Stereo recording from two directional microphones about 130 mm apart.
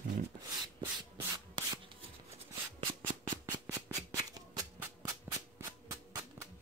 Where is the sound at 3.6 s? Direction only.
30° right (ahead or behind).